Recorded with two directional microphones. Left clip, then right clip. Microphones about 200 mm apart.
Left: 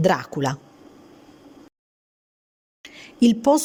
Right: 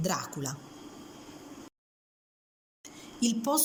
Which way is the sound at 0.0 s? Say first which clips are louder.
Left 13 dB; 40° left (ahead or behind).